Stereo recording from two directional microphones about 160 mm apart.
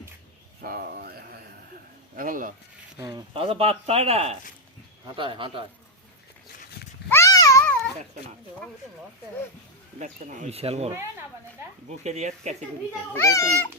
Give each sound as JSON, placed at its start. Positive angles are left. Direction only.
{"t": 0.6, "sound": "a sound", "side_deg": -70}
{"t": 2.1, "sound": "speech", "side_deg": -60}
{"t": 3.0, "sound": "speech", "side_deg": -25}
{"t": 7.1, "sound": "a sound", "side_deg": 20}
{"t": 7.6, "sound": "babbling", "side_deg": 10}
{"t": 10.0, "sound": "speech", "side_deg": -50}
{"t": 12.0, "sound": "speech", "side_deg": -45}
{"t": 13.1, "sound": "speech", "side_deg": 20}